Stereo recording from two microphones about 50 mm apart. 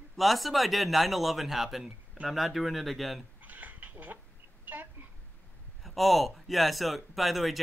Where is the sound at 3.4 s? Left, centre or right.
Right.